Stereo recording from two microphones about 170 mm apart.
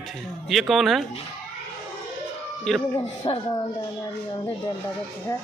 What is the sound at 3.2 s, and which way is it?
Speech, 30° left (ahead or behind).